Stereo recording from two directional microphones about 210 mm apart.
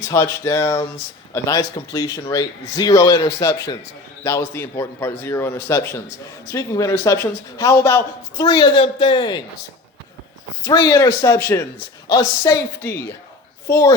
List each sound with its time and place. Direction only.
0.1 s a man's voice: 15° left (ahead or behind)
10.6 s a man's voice: 15° left (ahead or behind)